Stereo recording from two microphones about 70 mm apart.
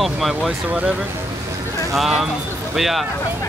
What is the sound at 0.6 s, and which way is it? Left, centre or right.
Speech, centre.